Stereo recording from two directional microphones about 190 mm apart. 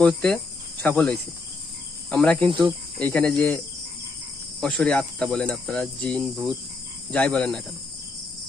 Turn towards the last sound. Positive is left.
turn(degrees=5)  # may be behind; listen again after turning